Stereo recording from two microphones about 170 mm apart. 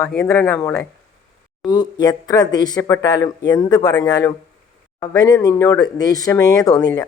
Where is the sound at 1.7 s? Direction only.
25° left (ahead or behind).